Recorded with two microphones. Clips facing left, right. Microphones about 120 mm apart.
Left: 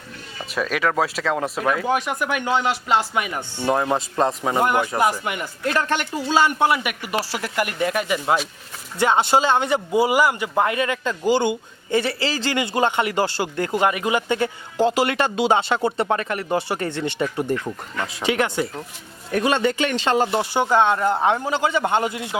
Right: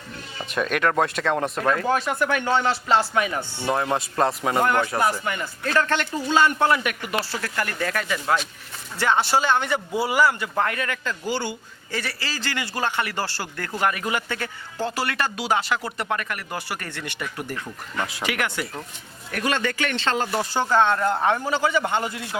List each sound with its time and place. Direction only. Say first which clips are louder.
0.3 s speech: even; centre (ahead or behind)
3.9 s a man's voice: left 1 dB; centre (ahead or behind); by 22.4 s 20° left (ahead or behind)